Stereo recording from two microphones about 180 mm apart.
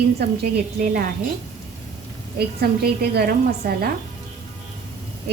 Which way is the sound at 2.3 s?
60° right (ahead or behind).